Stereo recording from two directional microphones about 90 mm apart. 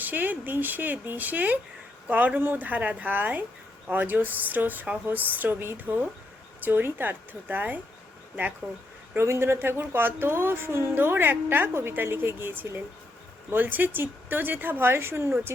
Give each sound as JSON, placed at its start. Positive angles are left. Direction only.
{"t": 0.0, "sound": "speech", "side_deg": -20}
{"t": 9.1, "sound": "speech", "side_deg": -30}